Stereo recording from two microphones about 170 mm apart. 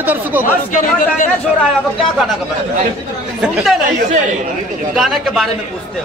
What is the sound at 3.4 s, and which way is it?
Speech, centre (ahead or behind).